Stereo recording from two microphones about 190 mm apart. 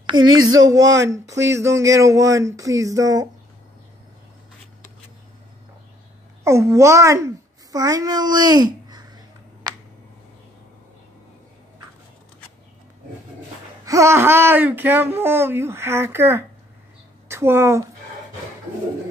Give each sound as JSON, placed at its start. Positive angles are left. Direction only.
{"t": 0.1, "sound": "speech", "side_deg": -90}
{"t": 1.4, "sound": "speech", "side_deg": -15}
{"t": 6.4, "sound": "a sound", "side_deg": -15}
{"t": 13.8, "sound": "speech", "side_deg": -15}